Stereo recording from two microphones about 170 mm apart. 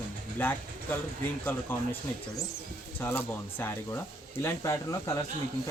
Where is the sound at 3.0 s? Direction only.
15° left (ahead or behind).